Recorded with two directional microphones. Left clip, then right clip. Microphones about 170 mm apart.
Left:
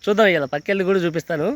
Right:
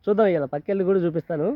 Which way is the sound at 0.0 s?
20° left (ahead or behind).